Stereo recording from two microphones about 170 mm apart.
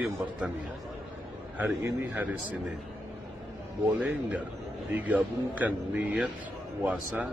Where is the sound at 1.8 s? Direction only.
15° right (ahead or behind).